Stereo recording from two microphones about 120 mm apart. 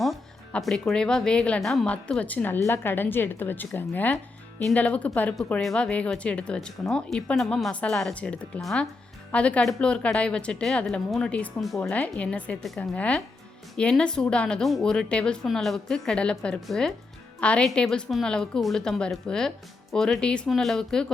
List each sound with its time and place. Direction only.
0.0 s a woman's voice: centre (ahead or behind)